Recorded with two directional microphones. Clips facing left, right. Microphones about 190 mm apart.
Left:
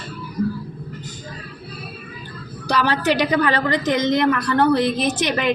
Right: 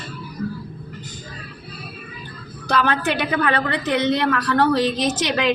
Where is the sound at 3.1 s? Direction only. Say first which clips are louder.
Left 2 dB; 60° right (ahead or behind).